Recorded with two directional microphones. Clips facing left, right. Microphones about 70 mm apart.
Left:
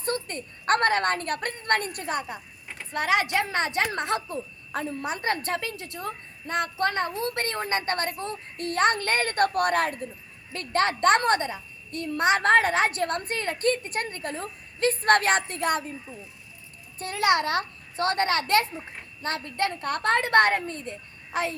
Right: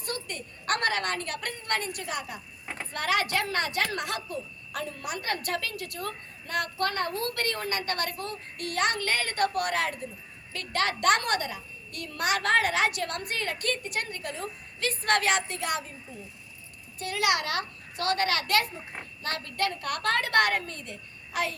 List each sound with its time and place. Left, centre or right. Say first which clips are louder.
0.0 s a woman's voice: left 6 dB; left
2.9 s speech: left 3 dB; left
10.5 s a woman's voice: left 4 dB; left
17.0 s a woman's voice: left 4 dB; left